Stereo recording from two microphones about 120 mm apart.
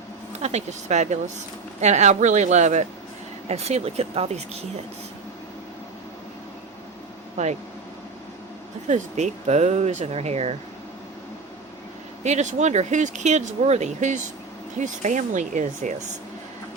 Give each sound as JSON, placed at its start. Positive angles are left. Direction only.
{"t": 0.3, "sound": "speech", "side_deg": -65}
{"t": 3.5, "sound": "speech", "side_deg": -60}
{"t": 7.4, "sound": "speech", "side_deg": -75}
{"t": 8.9, "sound": "speech", "side_deg": -80}
{"t": 12.2, "sound": "speech", "side_deg": -75}